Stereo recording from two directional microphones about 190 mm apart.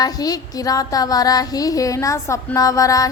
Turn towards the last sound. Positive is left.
turn(degrees=15)  # may be behind; listen again after turning